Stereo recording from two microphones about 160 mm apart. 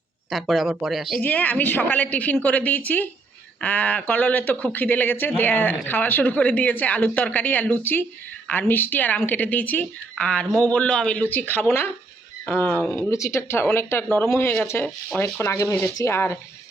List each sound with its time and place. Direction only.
0.3 s speech: centre (ahead or behind)
1.2 s speech: 10° left (ahead or behind)